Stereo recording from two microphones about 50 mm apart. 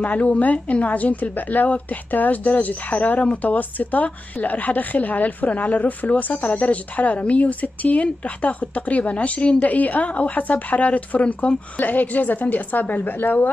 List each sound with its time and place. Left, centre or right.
0.0 s a woman's voice: left